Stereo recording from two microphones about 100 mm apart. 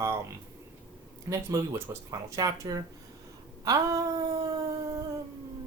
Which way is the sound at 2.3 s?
40° right (ahead or behind).